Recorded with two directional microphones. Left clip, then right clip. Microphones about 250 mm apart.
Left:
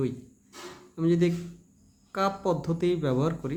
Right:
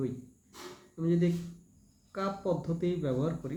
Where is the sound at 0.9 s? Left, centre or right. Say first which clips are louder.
Left 6 dB; left.